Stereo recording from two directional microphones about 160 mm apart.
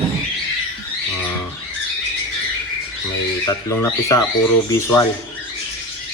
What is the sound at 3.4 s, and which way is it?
Speech, 20° left (ahead or behind).